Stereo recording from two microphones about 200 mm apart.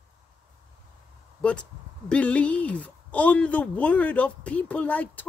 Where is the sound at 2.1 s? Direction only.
5° left (ahead or behind).